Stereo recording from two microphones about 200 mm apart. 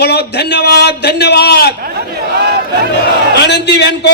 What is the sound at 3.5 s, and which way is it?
Speech, 60° left (ahead or behind).